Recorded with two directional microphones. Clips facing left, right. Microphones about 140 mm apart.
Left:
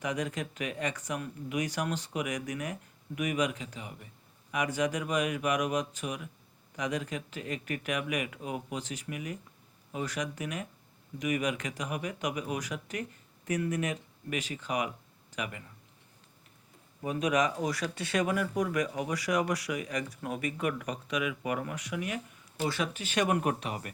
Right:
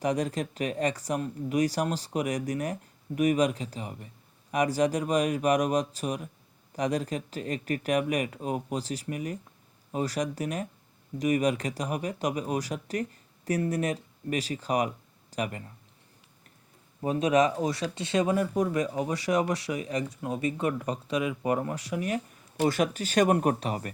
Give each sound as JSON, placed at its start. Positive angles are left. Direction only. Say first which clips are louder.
{"t": 0.0, "sound": "speech", "louder": "right 5 dB", "side_deg": -35}
{"t": 17.0, "sound": "speech", "louder": "right 5 dB", "side_deg": -30}
{"t": 22.5, "sound": "speech", "louder": "right 7 dB", "side_deg": -50}